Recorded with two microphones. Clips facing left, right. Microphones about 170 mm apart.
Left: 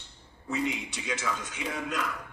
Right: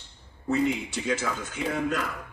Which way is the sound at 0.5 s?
55° right (ahead or behind).